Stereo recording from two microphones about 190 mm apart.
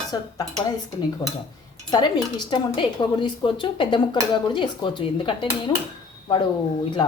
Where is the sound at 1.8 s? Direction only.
20° left (ahead or behind).